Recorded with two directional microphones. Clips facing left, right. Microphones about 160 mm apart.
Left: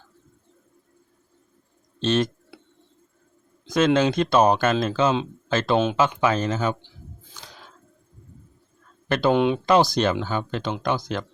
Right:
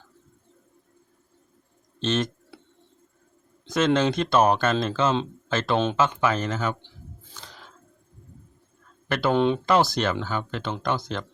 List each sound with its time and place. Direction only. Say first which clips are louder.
2.0 s a sound: left 3 dB; 15° left (ahead or behind)
3.7 s speech: left 2 dB; 10° left (ahead or behind)
9.0 s speech: left 2 dB; 20° left (ahead or behind)